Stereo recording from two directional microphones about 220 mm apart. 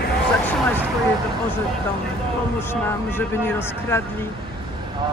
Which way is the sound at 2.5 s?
10° left (ahead or behind).